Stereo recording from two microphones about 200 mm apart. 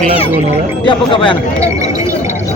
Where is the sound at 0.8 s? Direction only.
25° left (ahead or behind).